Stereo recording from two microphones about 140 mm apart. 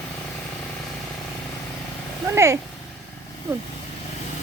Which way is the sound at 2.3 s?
20° right (ahead or behind).